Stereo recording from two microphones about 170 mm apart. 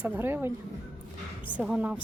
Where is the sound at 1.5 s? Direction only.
10° right (ahead or behind).